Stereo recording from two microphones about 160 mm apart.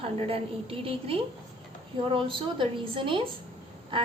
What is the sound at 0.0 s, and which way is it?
A woman's voice, 35° right (ahead or behind).